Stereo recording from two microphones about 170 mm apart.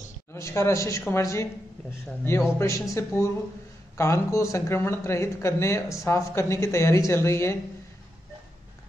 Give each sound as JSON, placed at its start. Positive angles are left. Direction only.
{"t": 0.3, "sound": "speech", "side_deg": 15}